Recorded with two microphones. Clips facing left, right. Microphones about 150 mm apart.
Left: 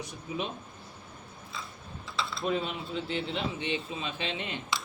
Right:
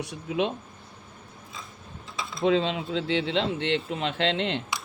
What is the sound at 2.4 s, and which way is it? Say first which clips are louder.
Speech: right 9 dB; 90° right.